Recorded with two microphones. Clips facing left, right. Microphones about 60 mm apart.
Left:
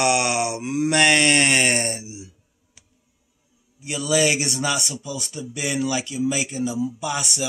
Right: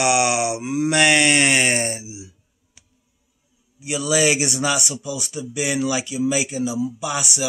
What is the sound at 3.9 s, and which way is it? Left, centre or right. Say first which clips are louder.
Speech: right 1 dB; centre.